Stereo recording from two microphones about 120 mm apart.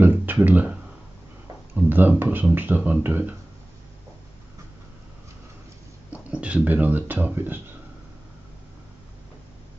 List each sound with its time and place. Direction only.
0.0 s a sound: 15° right (ahead or behind)
1.8 s speech: 15° right (ahead or behind)
6.0 s speech: 10° right (ahead or behind)